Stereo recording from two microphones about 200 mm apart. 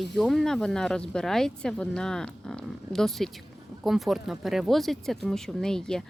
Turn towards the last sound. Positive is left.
turn(degrees=5)  # may be behind; listen again after turning